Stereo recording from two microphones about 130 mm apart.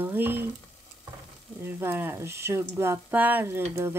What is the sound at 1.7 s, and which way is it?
Speech, 15° right (ahead or behind).